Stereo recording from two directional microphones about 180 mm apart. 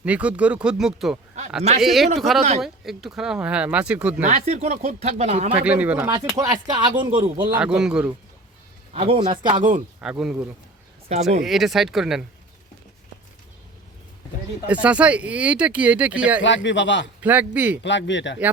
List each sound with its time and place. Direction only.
0.0 s speech: 5° right (ahead or behind)
4.2 s speech: 40° right (ahead or behind)
5.6 s speech: 10° right (ahead or behind); by 7.6 s 25° right (ahead or behind)
7.6 s speech: 5° right (ahead or behind)
8.9 s speech: 30° right (ahead or behind)
10.0 s speech: 5° right (ahead or behind)
11.1 s speech: 40° right (ahead or behind)
11.4 s speech: centre (ahead or behind)
14.7 s speech: 5° right (ahead or behind)
16.6 s speech: 85° left
17.2 s speech: 10° right (ahead or behind)
17.8 s speech: 80° left